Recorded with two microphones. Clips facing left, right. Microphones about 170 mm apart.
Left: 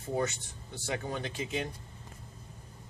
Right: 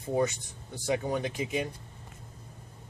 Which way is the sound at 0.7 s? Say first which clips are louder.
Right 6 dB; 15° right (ahead or behind).